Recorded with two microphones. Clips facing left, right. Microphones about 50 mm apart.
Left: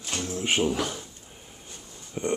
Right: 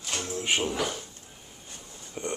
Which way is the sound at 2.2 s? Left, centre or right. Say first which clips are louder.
Left 5 dB; centre.